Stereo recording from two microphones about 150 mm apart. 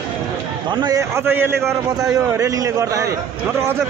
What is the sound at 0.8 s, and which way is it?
A man's voice, 20° right (ahead or behind).